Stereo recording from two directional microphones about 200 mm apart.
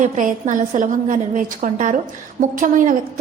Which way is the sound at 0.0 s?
40° right (ahead or behind).